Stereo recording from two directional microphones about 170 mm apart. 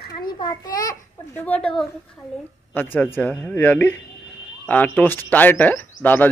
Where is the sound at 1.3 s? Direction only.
10° left (ahead or behind).